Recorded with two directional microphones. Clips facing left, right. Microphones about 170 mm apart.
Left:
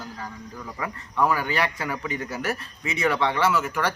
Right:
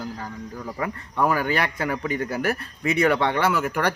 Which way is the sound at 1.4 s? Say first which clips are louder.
Right 2 dB; 50° right (ahead or behind).